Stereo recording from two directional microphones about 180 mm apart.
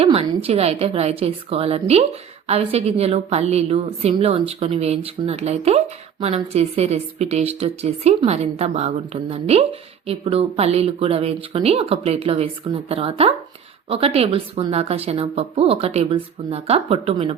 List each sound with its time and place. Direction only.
0.0 s speech: 35° right (ahead or behind)